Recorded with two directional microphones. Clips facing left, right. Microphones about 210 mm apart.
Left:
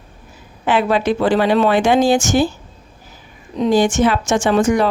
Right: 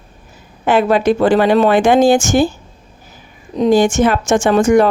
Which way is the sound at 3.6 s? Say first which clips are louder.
Right 3 dB; 45° right (ahead or behind).